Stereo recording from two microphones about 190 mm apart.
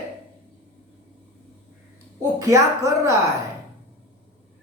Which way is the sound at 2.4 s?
15° right (ahead or behind).